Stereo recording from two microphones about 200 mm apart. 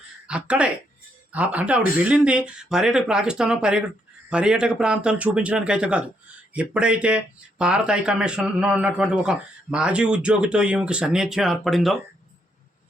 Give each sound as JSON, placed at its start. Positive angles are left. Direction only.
{"t": 0.3, "sound": "a man's voice", "side_deg": -5}